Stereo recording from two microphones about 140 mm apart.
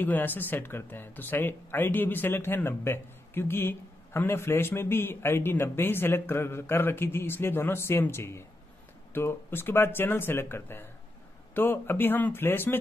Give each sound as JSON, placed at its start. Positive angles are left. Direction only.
{"t": 0.0, "sound": "speech", "side_deg": 15}